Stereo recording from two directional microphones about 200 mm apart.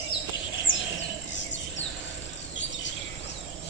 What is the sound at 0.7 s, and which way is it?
Bird, 75° left (ahead or behind).